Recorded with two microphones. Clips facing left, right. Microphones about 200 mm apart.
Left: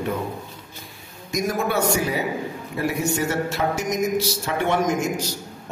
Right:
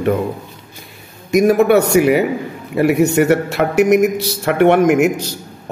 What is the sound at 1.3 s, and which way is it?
A man's voice, 65° right (ahead or behind).